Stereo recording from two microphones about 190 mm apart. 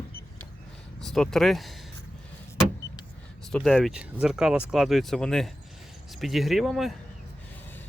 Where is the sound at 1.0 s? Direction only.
Centre (ahead or behind).